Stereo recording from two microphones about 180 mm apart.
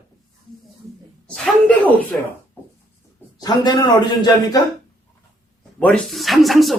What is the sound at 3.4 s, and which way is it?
Speech, 25° left (ahead or behind).